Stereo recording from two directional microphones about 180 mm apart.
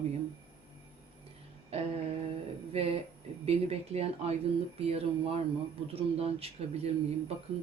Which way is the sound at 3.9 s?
35° right (ahead or behind).